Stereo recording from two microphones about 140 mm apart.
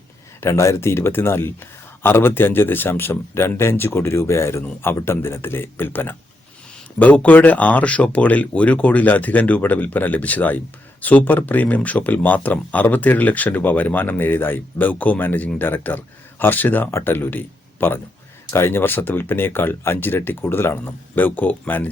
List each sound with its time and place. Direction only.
0.4 s speech: 20° left (ahead or behind)